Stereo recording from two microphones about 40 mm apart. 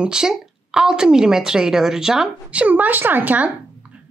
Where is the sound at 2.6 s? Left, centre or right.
Right.